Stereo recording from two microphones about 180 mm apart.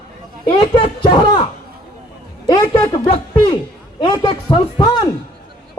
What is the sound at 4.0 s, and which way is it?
A man's voice, 25° left (ahead or behind).